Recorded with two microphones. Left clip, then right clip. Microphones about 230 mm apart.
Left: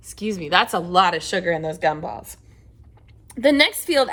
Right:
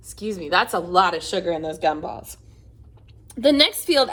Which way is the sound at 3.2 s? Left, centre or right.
Left.